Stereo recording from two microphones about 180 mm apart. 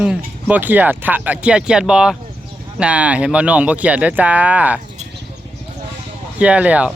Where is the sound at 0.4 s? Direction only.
10° right (ahead or behind).